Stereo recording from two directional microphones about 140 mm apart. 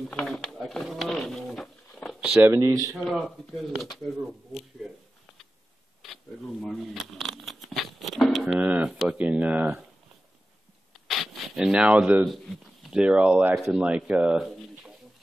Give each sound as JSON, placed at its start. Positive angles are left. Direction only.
{"t": 0.1, "sound": "pigeon", "side_deg": 5}
{"t": 2.1, "sound": "speech", "side_deg": -10}
{"t": 3.1, "sound": "speech", "side_deg": 0}
{"t": 6.6, "sound": "a sound", "side_deg": 0}
{"t": 8.5, "sound": "speech", "side_deg": -10}
{"t": 10.9, "sound": "a sound", "side_deg": 0}
{"t": 12.9, "sound": "speech", "side_deg": -10}